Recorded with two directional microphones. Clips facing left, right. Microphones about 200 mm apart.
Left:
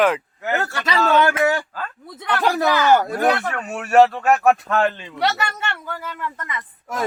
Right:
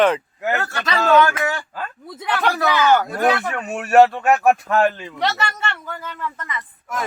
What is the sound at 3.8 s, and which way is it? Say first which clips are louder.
Speech: right 1 dB; 15° right (ahead or behind).